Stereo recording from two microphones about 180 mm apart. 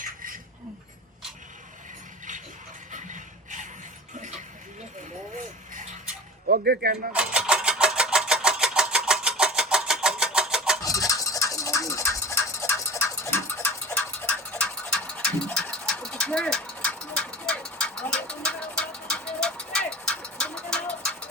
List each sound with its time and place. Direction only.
2.9 s music: 45° right (ahead or behind)
5.4 s a sound: 45° right (ahead or behind)
6.5 s speech: 60° right (ahead or behind)
7.1 s vehicle: 5° right (ahead or behind)
10.8 s bird: 20° left (ahead or behind)